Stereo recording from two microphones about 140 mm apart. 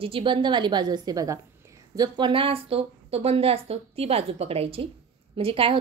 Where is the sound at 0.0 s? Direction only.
40° right (ahead or behind).